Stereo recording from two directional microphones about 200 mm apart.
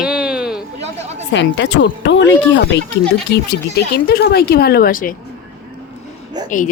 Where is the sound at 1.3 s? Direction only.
65° left (ahead or behind); by 5.1 s 45° left (ahead or behind).